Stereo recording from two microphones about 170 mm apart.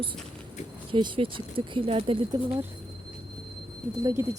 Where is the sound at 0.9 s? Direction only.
30° right (ahead or behind).